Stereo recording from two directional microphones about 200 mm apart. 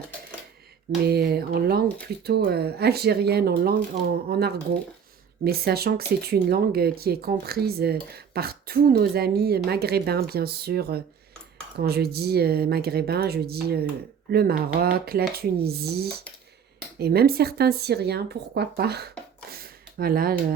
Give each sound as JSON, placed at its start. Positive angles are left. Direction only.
{"t": 1.0, "sound": "speech", "side_deg": -55}